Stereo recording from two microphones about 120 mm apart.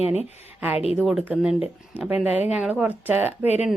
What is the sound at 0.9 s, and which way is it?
Speech, centre (ahead or behind).